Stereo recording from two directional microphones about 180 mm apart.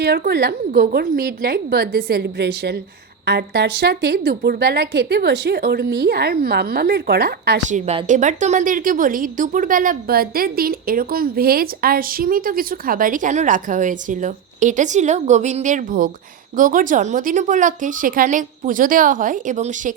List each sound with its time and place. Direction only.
0.0 s a woman's voice: 65° right (ahead or behind)
0.9 s a woman's voice: 55° right (ahead or behind)
7.7 s a woman's voice: 40° right (ahead or behind)